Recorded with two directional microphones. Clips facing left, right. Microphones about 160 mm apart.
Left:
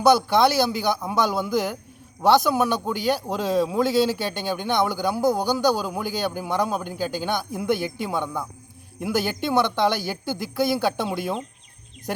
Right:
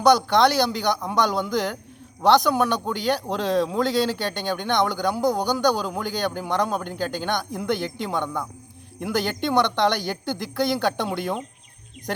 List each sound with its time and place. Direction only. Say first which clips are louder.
0.0 s speech: even; 5° left (ahead or behind)